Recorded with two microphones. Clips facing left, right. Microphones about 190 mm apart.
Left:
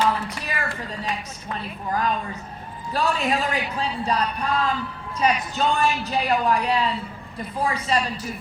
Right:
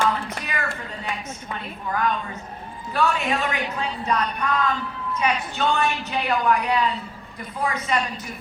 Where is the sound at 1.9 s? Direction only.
35° left (ahead or behind).